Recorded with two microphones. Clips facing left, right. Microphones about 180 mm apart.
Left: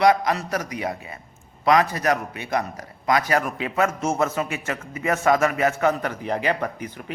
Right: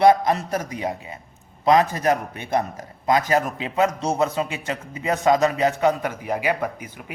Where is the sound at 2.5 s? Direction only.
25° right (ahead or behind).